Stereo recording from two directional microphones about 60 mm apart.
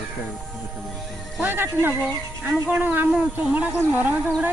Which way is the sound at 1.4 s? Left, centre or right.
Right.